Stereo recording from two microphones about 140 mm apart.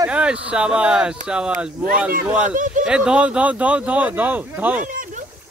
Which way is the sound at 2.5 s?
70° right (ahead or behind).